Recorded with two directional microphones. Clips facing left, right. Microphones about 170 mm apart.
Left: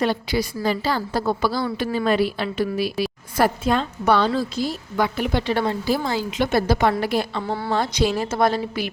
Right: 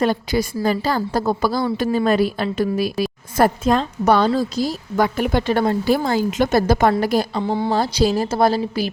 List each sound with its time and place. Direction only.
0.0 s a woman's voice: 45° right (ahead or behind)
7.4 s speech: 20° right (ahead or behind)
7.7 s a woman's voice: 35° right (ahead or behind)